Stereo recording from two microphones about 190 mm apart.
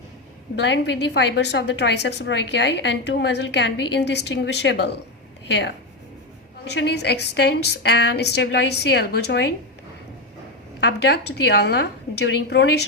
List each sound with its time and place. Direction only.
0.5 s a woman's voice: 65° left (ahead or behind)
10.8 s a woman's voice: 65° left (ahead or behind)